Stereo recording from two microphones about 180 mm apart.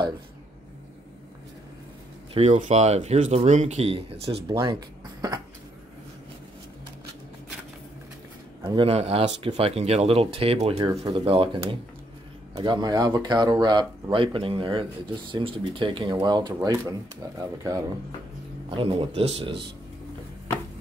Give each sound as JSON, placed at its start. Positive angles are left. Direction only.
{"t": 2.3, "sound": "speech", "side_deg": -35}
{"t": 8.6, "sound": "speech", "side_deg": -30}
{"t": 18.8, "sound": "speech", "side_deg": -30}